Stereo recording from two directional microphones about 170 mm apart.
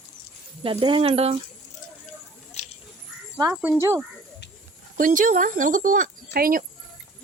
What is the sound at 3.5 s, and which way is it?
Speech, 10° right (ahead or behind).